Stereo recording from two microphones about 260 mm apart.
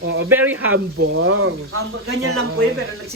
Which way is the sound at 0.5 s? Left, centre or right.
Right.